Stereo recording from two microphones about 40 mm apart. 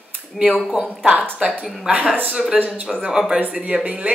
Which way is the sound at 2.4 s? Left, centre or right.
Centre.